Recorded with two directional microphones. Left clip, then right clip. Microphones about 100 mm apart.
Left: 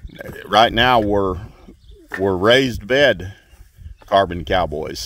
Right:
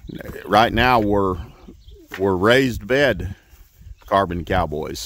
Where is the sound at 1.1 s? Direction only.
45° right (ahead or behind).